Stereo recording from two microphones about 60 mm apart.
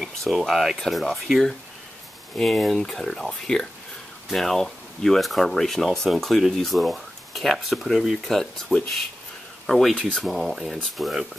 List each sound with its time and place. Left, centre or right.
0.0 s speech: centre